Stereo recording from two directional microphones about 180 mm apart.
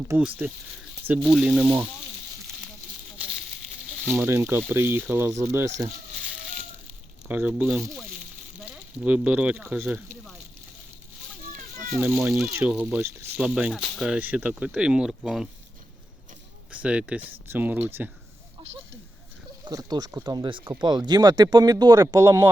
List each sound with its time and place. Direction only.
0.2 s speech: 10° right (ahead or behind)
4.0 s speech: 10° right (ahead or behind)
7.3 s speech: 10° right (ahead or behind)
11.9 s speech: 5° right (ahead or behind)
16.7 s speech: 5° right (ahead or behind)
19.6 s speech: 20° right (ahead or behind)